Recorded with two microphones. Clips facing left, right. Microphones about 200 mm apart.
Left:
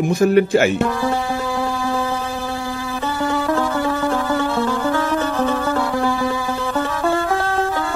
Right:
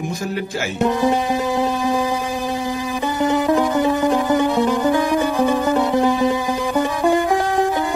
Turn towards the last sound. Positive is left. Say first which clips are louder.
# right 3 dB
turn(degrees=-15)  # may be behind; listen again after turning